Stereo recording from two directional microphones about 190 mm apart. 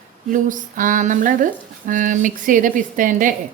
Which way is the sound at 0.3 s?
45° right (ahead or behind).